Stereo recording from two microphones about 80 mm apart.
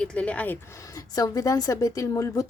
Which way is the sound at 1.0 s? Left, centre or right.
Left.